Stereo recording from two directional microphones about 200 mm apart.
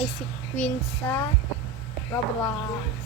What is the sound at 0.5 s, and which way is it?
Child singing, 5° left (ahead or behind).